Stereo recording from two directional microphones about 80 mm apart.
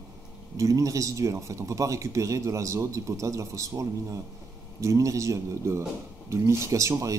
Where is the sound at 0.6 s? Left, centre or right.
Right.